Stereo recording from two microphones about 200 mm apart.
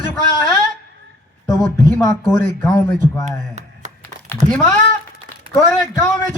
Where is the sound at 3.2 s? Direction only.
35° right (ahead or behind).